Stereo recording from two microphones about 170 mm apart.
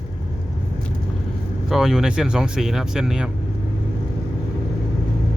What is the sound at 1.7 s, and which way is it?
Speech, centre (ahead or behind).